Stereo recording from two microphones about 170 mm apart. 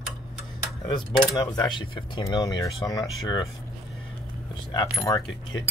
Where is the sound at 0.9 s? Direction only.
20° left (ahead or behind).